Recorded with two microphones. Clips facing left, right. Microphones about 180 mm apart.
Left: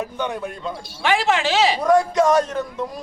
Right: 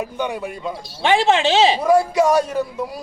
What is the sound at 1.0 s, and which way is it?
Speech, 25° right (ahead or behind).